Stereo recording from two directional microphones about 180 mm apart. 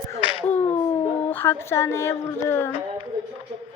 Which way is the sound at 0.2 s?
30° left (ahead or behind).